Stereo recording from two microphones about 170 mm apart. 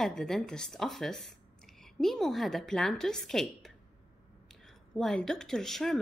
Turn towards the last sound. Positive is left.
turn(degrees=0)  # may be behind; listen again after turning